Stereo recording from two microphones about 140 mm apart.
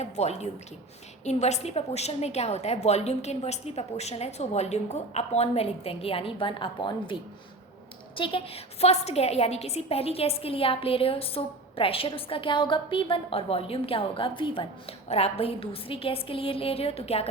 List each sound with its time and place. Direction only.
0.0 s a woman's voice: 50° left (ahead or behind)